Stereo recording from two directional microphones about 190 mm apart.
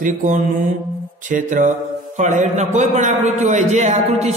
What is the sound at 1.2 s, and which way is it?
Speech, 40° right (ahead or behind).